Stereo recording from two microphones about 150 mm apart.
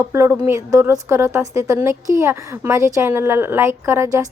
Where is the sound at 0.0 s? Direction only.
20° right (ahead or behind).